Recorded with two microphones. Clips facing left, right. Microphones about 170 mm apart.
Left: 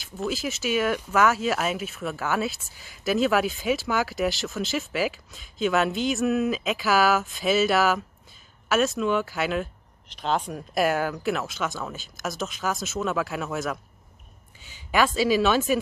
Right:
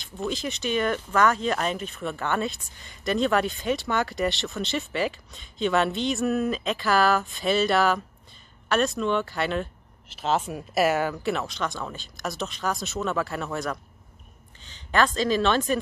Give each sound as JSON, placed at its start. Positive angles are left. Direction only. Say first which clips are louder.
{"t": 0.0, "sound": "speech", "louder": "left 1 dB", "side_deg": 5}